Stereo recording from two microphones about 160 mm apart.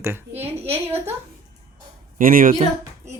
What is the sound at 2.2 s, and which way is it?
Speech, 60° right (ahead or behind).